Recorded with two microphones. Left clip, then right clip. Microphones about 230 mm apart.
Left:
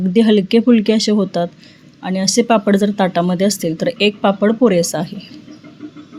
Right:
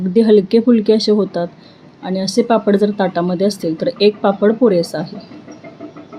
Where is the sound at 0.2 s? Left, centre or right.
Left.